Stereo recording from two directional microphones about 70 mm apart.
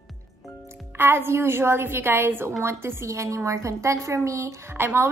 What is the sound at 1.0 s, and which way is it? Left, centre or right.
A woman's voice, right.